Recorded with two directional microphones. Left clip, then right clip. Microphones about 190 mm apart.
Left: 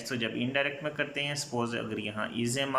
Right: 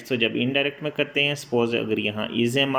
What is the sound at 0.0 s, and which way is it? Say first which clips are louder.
Speech: right 9 dB; 15° right (ahead or behind).